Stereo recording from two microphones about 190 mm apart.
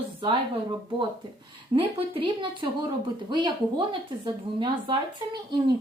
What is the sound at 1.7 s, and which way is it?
Speech, 30° right (ahead or behind).